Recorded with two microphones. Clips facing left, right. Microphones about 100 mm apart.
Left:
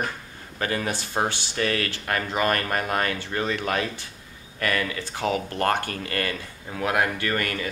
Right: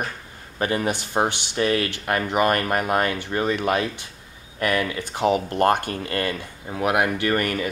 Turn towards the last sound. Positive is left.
turn(degrees=-20)  # may be behind; listen again after turning